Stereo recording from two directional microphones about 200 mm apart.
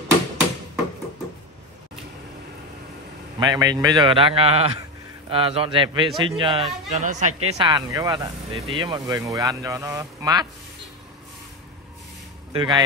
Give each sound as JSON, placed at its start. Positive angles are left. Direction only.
{"t": 3.3, "sound": "a man's voice", "side_deg": -20}
{"t": 7.4, "sound": "a man's voice", "side_deg": -20}
{"t": 12.5, "sound": "a man's voice", "side_deg": -20}